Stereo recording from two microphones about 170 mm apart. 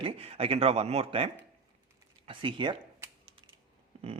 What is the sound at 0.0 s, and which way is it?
A man's voice, 35° right (ahead or behind).